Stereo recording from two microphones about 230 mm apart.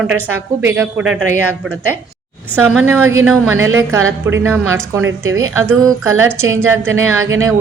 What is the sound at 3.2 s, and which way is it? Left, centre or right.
A woman's voice, centre.